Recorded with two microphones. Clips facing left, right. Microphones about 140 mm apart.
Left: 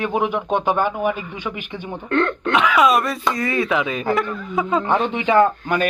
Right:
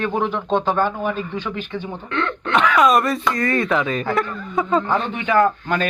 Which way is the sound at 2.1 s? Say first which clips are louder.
Left 5 dB; 45° left (ahead or behind).